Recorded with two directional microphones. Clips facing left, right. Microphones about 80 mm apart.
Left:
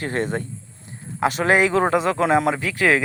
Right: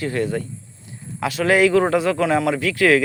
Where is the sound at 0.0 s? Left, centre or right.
Left.